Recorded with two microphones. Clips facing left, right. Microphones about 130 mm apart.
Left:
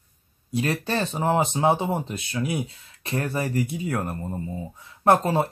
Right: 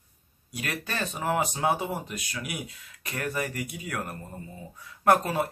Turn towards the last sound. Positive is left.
turn(degrees=25)  # may be behind; listen again after turning